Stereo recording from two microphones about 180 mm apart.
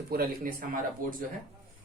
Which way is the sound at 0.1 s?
55° right (ahead or behind).